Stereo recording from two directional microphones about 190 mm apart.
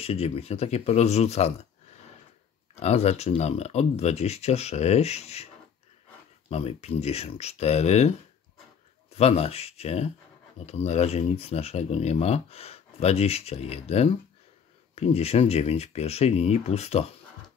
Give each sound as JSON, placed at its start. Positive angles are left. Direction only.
{"t": 0.0, "sound": "speech", "side_deg": 30}
{"t": 2.7, "sound": "speech", "side_deg": 35}
{"t": 6.5, "sound": "speech", "side_deg": 35}
{"t": 9.1, "sound": "speech", "side_deg": 35}